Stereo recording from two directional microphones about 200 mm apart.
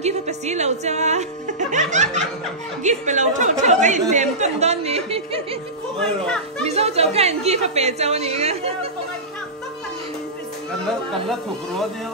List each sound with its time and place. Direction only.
0.0 s a woman's voice: 35° right (ahead or behind)
6.6 s a woman's voice: 30° right (ahead or behind)